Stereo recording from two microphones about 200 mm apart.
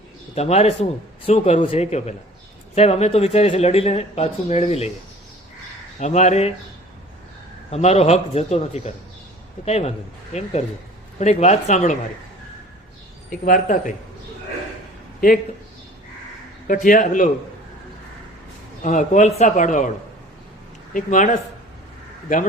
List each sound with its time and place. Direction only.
0.3 s speech: 30° left (ahead or behind)
6.0 s speech: 35° left (ahead or behind)
7.7 s speech: 35° left (ahead or behind)
13.4 s speech: 40° left (ahead or behind)
16.6 s speech: 40° left (ahead or behind)
18.8 s speech: 40° left (ahead or behind)
20.9 s speech: 40° left (ahead or behind)